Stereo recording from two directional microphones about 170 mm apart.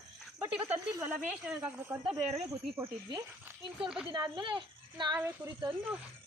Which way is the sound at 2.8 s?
25° right (ahead or behind).